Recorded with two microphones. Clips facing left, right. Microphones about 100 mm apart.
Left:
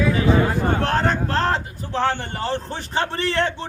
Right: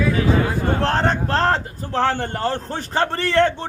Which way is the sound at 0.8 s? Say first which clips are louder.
Right 1 dB; 30° right (ahead or behind).